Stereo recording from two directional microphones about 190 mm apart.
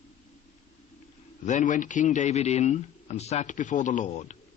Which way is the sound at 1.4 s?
40° left (ahead or behind).